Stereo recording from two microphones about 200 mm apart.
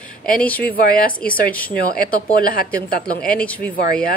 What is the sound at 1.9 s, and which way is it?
Speech, 45° left (ahead or behind).